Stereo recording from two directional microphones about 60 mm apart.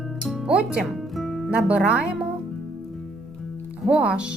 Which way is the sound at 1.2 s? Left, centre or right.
Centre.